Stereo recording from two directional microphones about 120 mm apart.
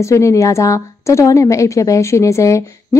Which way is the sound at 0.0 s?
25° left (ahead or behind).